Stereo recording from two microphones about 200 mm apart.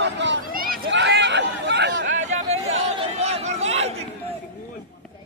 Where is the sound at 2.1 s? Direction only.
35° right (ahead or behind).